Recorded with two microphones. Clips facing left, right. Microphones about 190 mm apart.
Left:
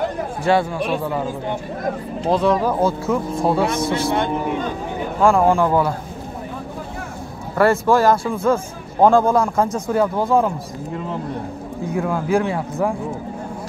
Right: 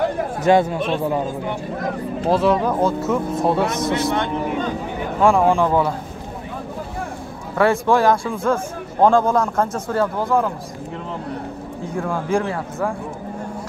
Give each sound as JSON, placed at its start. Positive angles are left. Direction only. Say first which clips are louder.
{"t": 0.4, "sound": "speech", "louder": "right 2 dB", "side_deg": -20}
{"t": 2.2, "sound": "speech", "louder": "even", "side_deg": -5}
{"t": 3.6, "sound": "speech", "louder": "even", "side_deg": -20}
{"t": 5.2, "sound": "speech", "louder": "even", "side_deg": 0}
{"t": 7.5, "sound": "a man's voice", "louder": "left 1 dB", "side_deg": 5}
{"t": 11.9, "sound": "a man's voice", "louder": "left 2 dB", "side_deg": 5}